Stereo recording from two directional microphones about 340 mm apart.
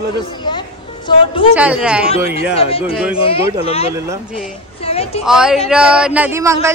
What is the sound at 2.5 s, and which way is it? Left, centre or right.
A woman's voice, centre.